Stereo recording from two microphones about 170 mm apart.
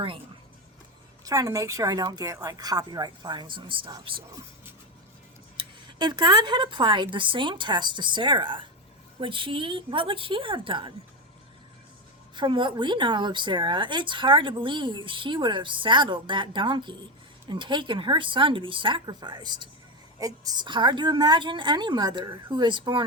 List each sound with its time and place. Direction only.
1.2 s speech: 20° right (ahead or behind)
5.5 s a woman's voice: 25° right (ahead or behind)
12.4 s speech: 30° right (ahead or behind)